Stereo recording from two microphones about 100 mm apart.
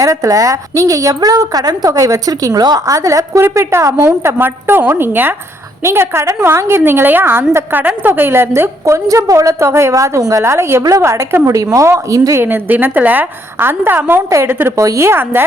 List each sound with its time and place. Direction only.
0.0 s a woman's voice: 35° right (ahead or behind)
12.4 s a woman's voice: 20° right (ahead or behind)